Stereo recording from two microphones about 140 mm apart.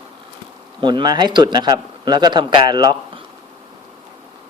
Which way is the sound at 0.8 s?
35° right (ahead or behind).